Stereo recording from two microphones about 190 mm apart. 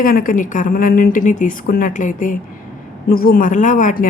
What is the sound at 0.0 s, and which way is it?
Speech, 45° left (ahead or behind).